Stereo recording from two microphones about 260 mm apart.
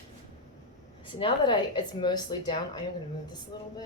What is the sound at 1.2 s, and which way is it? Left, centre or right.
A woman's voice, centre.